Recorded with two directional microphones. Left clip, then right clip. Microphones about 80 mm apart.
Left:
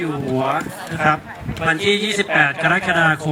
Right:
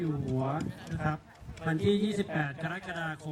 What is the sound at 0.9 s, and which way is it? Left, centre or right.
A man's voice, centre.